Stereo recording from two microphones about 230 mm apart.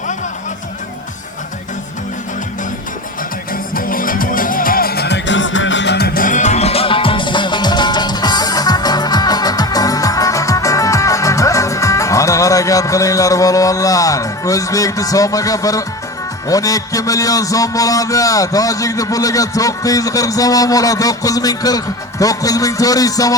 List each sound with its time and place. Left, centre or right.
3.5 s music: left; by 15.8 s centre
16.5 s a man's voice: centre